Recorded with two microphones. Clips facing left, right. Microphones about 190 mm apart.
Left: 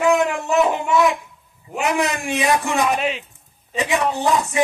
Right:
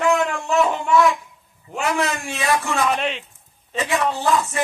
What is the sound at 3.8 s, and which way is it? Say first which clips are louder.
Speech: left 2 dB; 15° left (ahead or behind).